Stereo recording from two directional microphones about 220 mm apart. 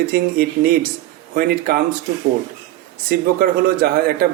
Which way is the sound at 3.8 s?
45° right (ahead or behind).